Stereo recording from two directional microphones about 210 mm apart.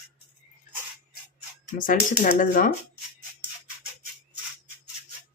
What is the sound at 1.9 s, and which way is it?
Speech, 40° left (ahead or behind).